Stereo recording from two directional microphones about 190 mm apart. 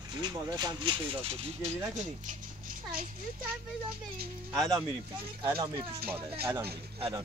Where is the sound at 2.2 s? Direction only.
40° right (ahead or behind).